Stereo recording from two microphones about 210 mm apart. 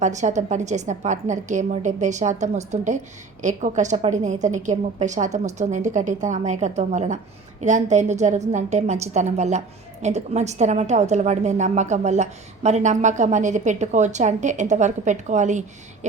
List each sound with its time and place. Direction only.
0.0 s a woman's voice: 35° right (ahead or behind)